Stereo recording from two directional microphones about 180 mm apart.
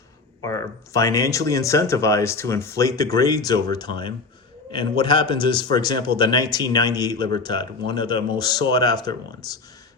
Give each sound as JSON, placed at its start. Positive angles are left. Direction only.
{"t": 0.4, "sound": "speech", "side_deg": 15}